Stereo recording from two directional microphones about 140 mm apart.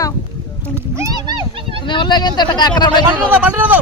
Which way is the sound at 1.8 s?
35° left (ahead or behind).